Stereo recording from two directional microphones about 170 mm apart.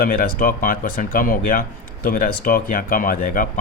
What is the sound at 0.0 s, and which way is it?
Speech, 55° left (ahead or behind).